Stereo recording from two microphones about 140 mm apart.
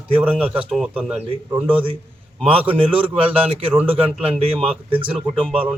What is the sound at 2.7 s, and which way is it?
A man's voice, 40° right (ahead or behind).